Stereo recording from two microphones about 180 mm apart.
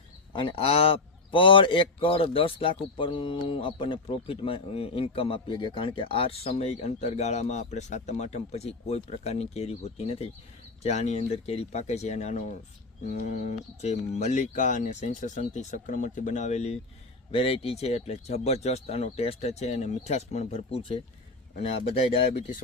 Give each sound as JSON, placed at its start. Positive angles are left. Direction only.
{"t": 0.3, "sound": "a man's voice", "side_deg": 30}